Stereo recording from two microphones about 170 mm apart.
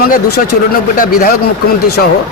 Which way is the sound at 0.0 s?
60° left (ahead or behind).